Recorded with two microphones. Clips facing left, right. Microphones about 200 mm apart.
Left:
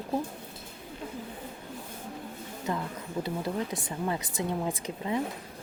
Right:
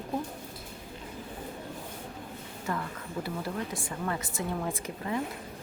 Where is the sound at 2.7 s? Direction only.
20° left (ahead or behind).